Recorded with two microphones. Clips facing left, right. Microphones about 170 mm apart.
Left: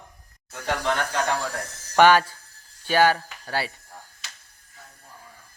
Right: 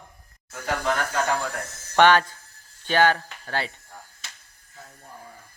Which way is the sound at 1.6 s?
10° left (ahead or behind).